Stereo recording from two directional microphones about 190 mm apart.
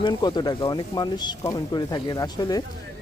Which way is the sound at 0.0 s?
25° left (ahead or behind).